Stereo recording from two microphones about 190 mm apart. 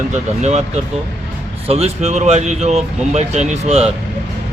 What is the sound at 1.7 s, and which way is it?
Speech, 35° right (ahead or behind).